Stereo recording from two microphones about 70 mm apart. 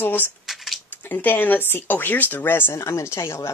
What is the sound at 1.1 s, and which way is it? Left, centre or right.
Speech, left.